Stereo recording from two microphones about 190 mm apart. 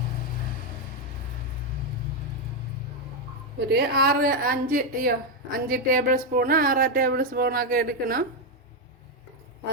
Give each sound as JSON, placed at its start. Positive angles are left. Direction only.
{"t": 3.7, "sound": "a woman's voice", "side_deg": -55}